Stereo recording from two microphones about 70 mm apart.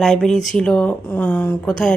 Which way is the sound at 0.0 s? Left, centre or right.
Centre.